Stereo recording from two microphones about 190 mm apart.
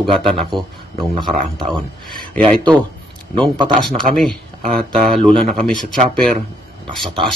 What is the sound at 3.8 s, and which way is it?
Speech, 5° left (ahead or behind).